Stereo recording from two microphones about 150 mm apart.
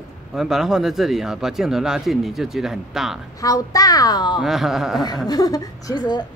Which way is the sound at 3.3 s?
20° left (ahead or behind).